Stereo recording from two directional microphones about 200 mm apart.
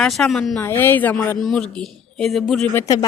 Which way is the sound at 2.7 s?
15° left (ahead or behind).